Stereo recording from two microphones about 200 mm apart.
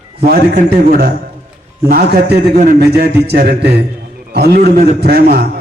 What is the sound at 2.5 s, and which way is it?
Speech, 35° right (ahead or behind).